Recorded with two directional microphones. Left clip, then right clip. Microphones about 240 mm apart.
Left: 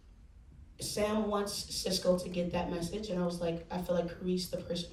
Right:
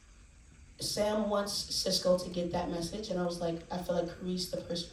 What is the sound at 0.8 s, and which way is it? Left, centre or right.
Speech, centre.